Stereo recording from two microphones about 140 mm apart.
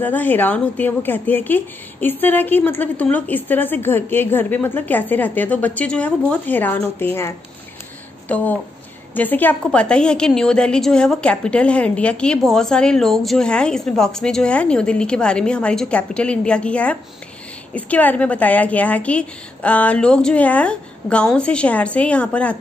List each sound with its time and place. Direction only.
0.0 s a woman's voice: 10° left (ahead or behind)